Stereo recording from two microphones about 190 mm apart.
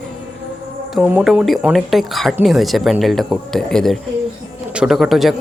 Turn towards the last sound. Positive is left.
turn(degrees=0)  # may be behind; listen again after turning